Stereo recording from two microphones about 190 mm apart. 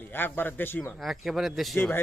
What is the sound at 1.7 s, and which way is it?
Speech, 10° left (ahead or behind).